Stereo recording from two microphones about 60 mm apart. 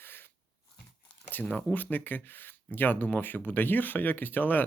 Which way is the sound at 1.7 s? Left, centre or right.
Left.